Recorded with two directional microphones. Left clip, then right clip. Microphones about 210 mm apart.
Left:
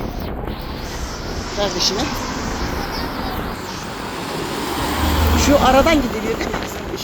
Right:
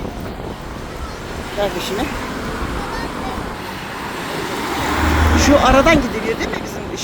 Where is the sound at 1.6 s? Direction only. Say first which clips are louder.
Right 1 dB; 5° right (ahead or behind).